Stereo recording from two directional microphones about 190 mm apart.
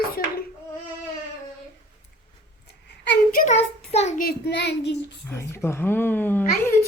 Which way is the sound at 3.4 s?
35° left (ahead or behind).